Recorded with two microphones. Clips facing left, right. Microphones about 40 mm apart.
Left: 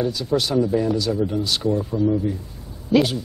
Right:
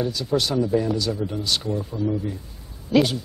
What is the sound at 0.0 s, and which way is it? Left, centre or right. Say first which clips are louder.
Speech: left 2 dB; centre.